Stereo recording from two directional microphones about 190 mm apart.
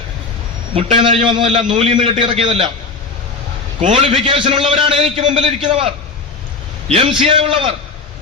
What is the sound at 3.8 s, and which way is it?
A man's voice, 30° right (ahead or behind).